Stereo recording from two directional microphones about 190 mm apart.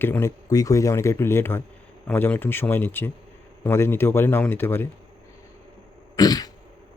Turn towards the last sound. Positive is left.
turn(degrees=20)  # may be behind; listen again after turning